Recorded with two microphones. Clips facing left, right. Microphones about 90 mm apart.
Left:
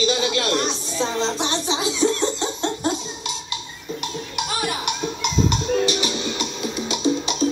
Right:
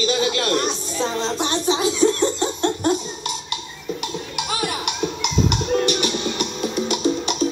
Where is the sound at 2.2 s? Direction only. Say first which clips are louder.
Right 3 dB; 20° left (ahead or behind).